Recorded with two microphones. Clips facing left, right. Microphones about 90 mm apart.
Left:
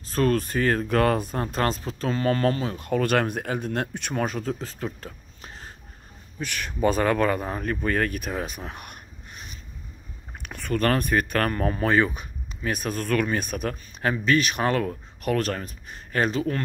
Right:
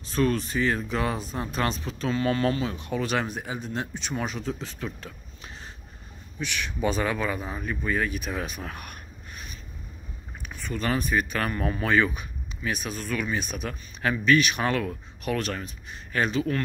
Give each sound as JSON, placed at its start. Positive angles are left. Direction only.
{"t": 0.0, "sound": "speech", "side_deg": 45}
{"t": 1.5, "sound": "speech", "side_deg": 40}
{"t": 8.3, "sound": "a sound", "side_deg": 35}
{"t": 10.4, "sound": "speech", "side_deg": 60}
{"t": 12.7, "sound": "speech", "side_deg": 50}
{"t": 14.1, "sound": "speech", "side_deg": 35}